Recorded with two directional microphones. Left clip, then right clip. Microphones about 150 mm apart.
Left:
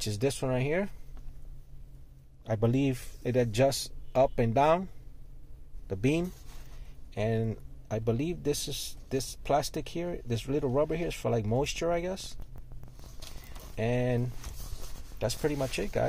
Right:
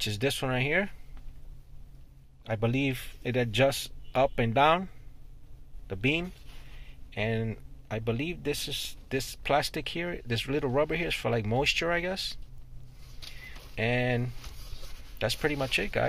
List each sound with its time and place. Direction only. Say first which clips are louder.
0.0 s speech: right 1 dB; 20° left (ahead or behind)
2.4 s speech: even; 30° left (ahead or behind)
5.9 s speech: right 1 dB; 30° left (ahead or behind); by 12.4 s 15° left (ahead or behind)
13.7 s speech: right 2 dB; 15° left (ahead or behind)